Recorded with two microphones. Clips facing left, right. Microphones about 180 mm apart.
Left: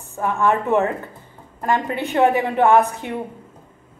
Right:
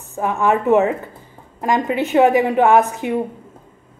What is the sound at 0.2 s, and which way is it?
Speech, 15° right (ahead or behind).